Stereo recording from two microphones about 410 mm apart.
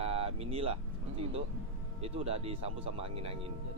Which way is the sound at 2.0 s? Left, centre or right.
Centre.